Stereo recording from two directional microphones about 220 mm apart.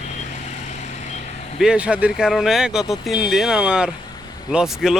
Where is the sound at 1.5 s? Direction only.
5° right (ahead or behind).